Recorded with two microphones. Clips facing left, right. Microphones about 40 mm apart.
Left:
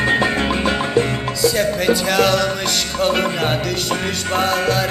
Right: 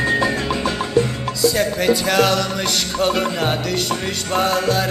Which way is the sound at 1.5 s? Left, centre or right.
Centre.